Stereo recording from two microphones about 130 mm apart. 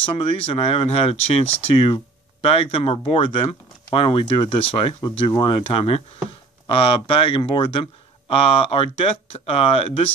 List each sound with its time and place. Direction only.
0.2 s speech: 40° left (ahead or behind)